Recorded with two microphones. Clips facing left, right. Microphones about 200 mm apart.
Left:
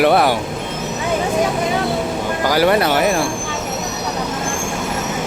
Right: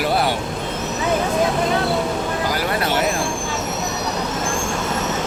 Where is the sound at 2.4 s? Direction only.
85° left.